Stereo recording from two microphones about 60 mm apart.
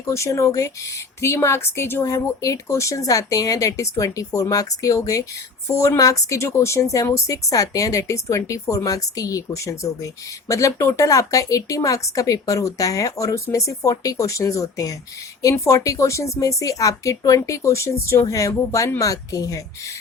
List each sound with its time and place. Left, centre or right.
0.0 s speech: left
2.0 s a woman's voice: left
5.6 s a woman's voice: left
6.0 s a woman's voice: left
18.3 s speech: left